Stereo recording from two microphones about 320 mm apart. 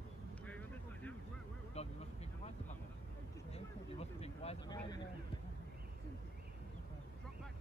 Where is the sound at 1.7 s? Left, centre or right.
Centre.